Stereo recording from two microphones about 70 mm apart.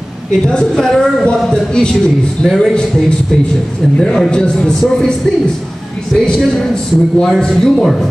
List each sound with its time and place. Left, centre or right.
0.5 s a man's voice: centre
4.0 s a man's voice: centre
6.1 s a man's voice: centre